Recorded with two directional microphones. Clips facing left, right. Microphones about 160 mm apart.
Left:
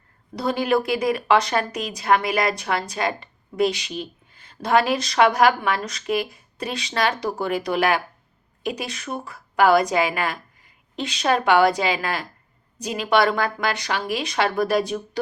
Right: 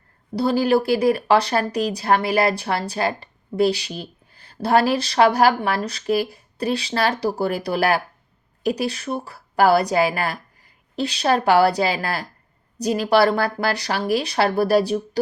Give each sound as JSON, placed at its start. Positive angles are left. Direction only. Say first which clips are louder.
{"t": 0.3, "sound": "a woman's voice", "louder": "right 3 dB", "side_deg": -35}